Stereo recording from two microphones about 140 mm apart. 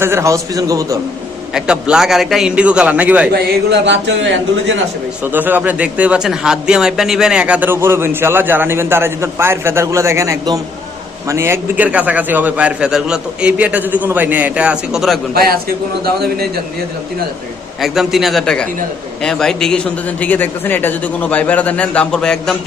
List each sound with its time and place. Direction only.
0.0 s a man's voice: 20° right (ahead or behind)
1.5 s a man's voice: 5° right (ahead or behind)
5.3 s a man's voice: 15° right (ahead or behind)
15.4 s a man's voice: 90° right
17.7 s a man's voice: centre (ahead or behind)